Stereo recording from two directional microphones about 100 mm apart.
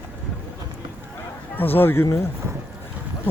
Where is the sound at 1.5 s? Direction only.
20° left (ahead or behind).